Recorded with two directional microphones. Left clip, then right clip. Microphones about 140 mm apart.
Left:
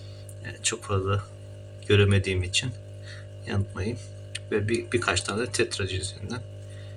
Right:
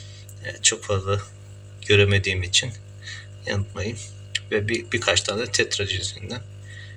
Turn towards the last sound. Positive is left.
turn(degrees=-10)  # may be behind; listen again after turning